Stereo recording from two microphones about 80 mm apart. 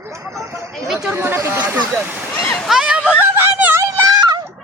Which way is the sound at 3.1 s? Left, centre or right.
Right.